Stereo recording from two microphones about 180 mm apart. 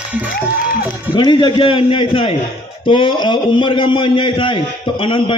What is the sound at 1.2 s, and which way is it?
A man's voice, 25° left (ahead or behind).